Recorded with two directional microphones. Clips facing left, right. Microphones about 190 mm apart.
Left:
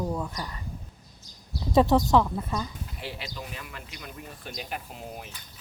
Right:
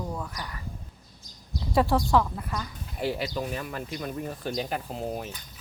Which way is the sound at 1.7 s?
20° left (ahead or behind).